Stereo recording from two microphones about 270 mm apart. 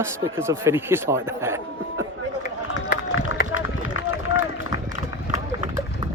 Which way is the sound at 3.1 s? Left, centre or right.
Left.